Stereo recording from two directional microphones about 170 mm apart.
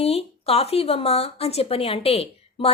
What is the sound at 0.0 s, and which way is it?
Speech, 35° left (ahead or behind).